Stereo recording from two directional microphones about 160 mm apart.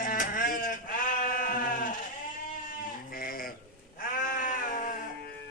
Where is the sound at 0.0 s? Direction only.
60° left (ahead or behind).